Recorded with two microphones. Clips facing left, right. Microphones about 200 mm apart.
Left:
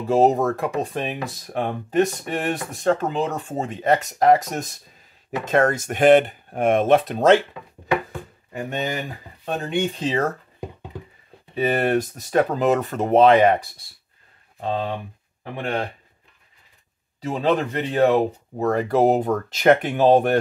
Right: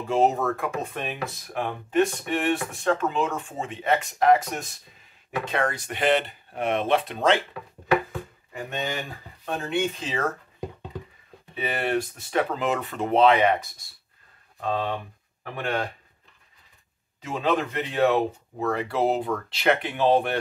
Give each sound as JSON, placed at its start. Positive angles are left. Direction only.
{"t": 0.0, "sound": "speech", "side_deg": 35}
{"t": 9.9, "sound": "speech", "side_deg": 35}
{"t": 11.5, "sound": "speech", "side_deg": 40}
{"t": 14.6, "sound": "speech", "side_deg": 25}
{"t": 17.2, "sound": "speech", "side_deg": 35}